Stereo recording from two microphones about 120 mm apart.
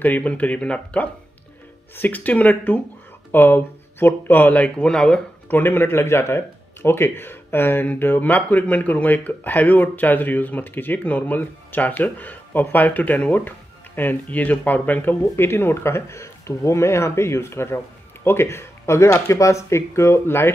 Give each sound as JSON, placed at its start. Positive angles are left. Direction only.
{"t": 0.0, "sound": "speech", "side_deg": 15}
{"t": 5.6, "sound": "speech", "side_deg": 20}